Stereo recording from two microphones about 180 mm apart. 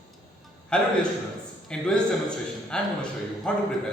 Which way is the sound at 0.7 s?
5° left (ahead or behind).